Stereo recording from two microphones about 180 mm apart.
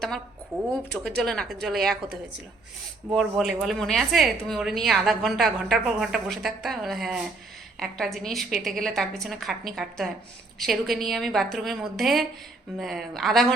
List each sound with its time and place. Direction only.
0.9 s a woman's voice: 5° left (ahead or behind)
3.1 s a woman's voice: centre (ahead or behind)